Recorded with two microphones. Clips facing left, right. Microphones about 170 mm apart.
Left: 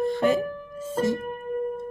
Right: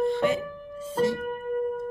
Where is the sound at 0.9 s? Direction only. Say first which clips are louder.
Even; 45° left (ahead or behind).